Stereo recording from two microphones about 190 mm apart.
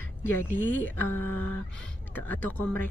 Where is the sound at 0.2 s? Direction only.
10° left (ahead or behind).